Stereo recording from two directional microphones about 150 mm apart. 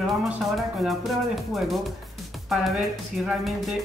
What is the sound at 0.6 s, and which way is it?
Speech, centre (ahead or behind).